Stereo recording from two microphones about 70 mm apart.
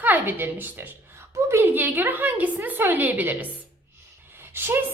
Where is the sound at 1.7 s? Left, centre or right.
Right.